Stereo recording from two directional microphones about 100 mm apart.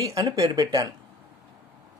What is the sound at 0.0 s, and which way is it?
Speech, 35° right (ahead or behind).